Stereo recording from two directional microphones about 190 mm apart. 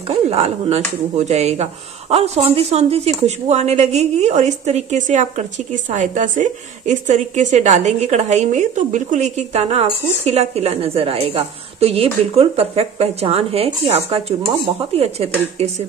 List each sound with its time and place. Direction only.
0.1 s a woman's voice: 35° right (ahead or behind)